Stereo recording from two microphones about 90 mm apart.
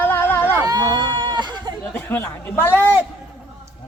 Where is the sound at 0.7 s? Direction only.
50° right (ahead or behind).